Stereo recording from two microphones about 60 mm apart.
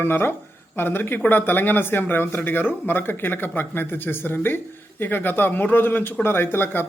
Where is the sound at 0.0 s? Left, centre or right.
Left.